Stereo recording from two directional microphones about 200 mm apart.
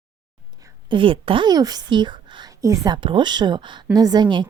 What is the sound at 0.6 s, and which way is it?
A woman's voice, 20° right (ahead or behind).